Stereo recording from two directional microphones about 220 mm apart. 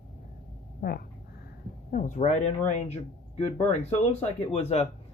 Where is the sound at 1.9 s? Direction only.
35° left (ahead or behind).